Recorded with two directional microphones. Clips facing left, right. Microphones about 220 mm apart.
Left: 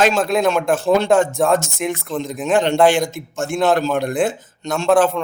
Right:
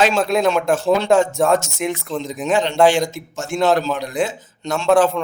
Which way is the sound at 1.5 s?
55° left (ahead or behind).